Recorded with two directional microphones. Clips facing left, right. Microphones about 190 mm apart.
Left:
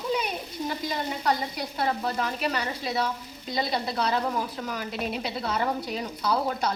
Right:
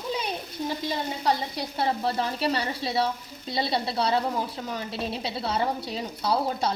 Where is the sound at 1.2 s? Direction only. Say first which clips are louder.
Right 1 dB; 30° right (ahead or behind).